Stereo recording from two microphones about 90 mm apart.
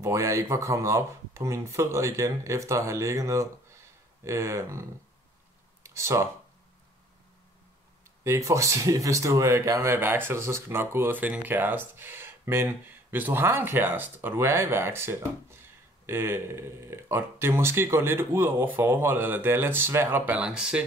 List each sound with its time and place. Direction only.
0.0 s speech: 35° right (ahead or behind)
5.9 s speech: 30° right (ahead or behind)
8.2 s speech: 35° right (ahead or behind)
20.4 s speech: 10° right (ahead or behind)